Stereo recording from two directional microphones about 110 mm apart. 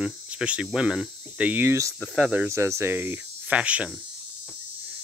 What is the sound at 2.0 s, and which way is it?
Speech, 10° right (ahead or behind).